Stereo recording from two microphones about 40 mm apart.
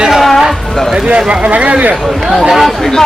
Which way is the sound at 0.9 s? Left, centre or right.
Right.